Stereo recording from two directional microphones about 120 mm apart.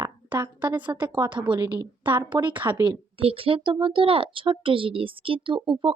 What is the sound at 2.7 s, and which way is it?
Speech, 40° right (ahead or behind).